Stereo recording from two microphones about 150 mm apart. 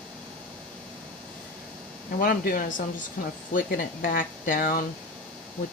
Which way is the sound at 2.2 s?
70° left (ahead or behind).